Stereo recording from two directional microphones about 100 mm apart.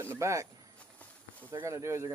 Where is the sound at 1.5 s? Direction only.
30° right (ahead or behind).